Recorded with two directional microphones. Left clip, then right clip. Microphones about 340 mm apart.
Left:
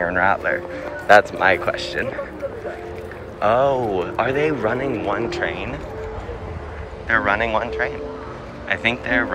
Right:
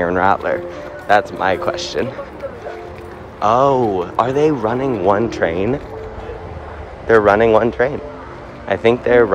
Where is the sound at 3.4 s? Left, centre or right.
Centre.